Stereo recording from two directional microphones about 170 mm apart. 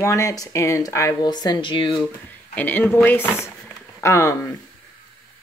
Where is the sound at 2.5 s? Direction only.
10° left (ahead or behind).